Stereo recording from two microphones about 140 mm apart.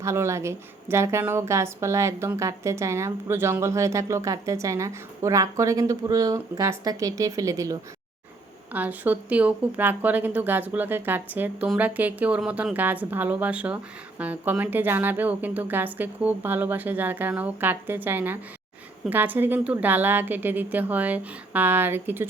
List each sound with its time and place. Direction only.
0.0 s a woman's voice: 20° right (ahead or behind)
8.7 s speech: 10° right (ahead or behind)